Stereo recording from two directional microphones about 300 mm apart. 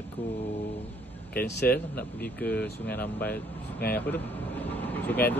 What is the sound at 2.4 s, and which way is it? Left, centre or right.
Speech, centre.